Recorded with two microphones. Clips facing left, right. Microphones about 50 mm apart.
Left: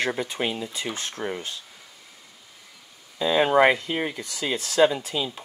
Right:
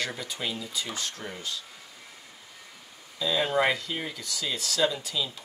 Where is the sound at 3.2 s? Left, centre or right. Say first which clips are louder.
Left 7 dB; left.